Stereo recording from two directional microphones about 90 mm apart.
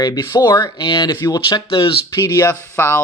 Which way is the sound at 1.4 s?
75° left (ahead or behind).